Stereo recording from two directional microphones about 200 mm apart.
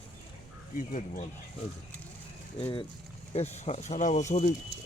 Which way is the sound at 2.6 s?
25° left (ahead or behind).